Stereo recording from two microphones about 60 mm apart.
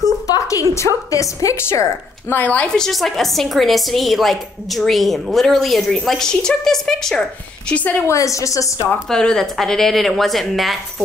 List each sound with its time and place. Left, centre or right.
0.0 s a sound: left
1.7 s a woman's voice: left
2.4 s a woman's voice: left
2.9 s a woman's voice: centre
7.7 s a woman's voice: left
8.1 s a woman's voice: left
9.1 s a woman's voice: centre